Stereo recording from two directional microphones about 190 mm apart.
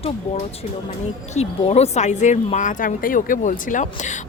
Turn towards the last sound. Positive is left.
turn(degrees=40)  # may be behind; listen again after turning